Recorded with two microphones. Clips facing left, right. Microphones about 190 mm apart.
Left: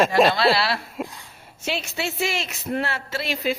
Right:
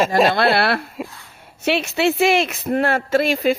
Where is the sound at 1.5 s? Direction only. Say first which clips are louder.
Right 8 dB; 65° right (ahead or behind).